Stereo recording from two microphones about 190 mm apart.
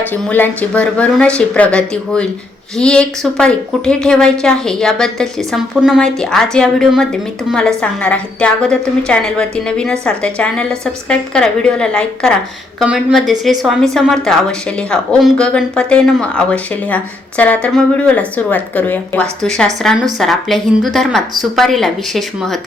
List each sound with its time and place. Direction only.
0.1 s speech: 10° left (ahead or behind)